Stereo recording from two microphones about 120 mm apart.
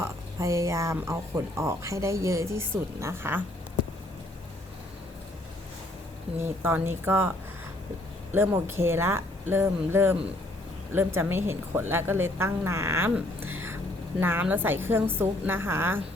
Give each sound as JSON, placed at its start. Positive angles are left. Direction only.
{"t": 0.0, "sound": "speech", "side_deg": -25}
{"t": 6.4, "sound": "speech", "side_deg": -20}
{"t": 13.1, "sound": "a sound", "side_deg": -15}
{"t": 14.2, "sound": "a woman's voice", "side_deg": -15}